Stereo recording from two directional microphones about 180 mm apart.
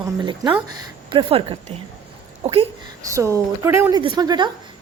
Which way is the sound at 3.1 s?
15° right (ahead or behind).